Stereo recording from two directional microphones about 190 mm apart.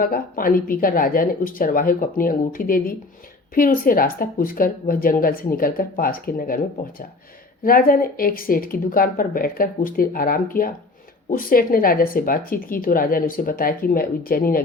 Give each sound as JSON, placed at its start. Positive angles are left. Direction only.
{"t": 0.0, "sound": "speech", "side_deg": 50}
{"t": 7.6, "sound": "speech", "side_deg": 50}